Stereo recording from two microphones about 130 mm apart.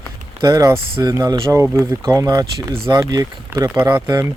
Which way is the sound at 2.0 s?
25° right (ahead or behind).